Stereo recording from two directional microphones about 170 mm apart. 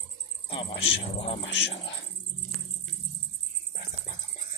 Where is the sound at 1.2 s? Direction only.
35° left (ahead or behind).